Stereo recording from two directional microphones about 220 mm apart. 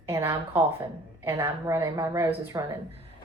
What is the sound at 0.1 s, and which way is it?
A woman's voice, 10° right (ahead or behind).